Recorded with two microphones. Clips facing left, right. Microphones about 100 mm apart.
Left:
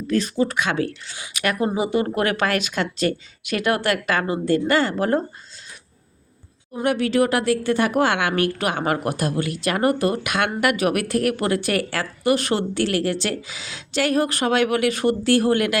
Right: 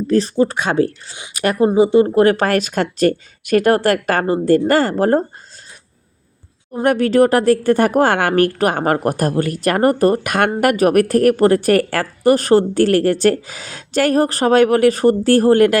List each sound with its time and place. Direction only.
0.1 s a woman's voice: 35° right (ahead or behind)
6.8 s a woman's voice: 45° right (ahead or behind)